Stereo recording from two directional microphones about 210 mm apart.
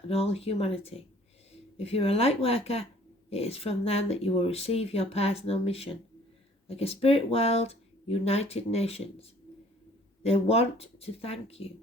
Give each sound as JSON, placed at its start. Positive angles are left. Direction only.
{"t": 0.1, "sound": "speech", "side_deg": 30}
{"t": 10.2, "sound": "speech", "side_deg": 30}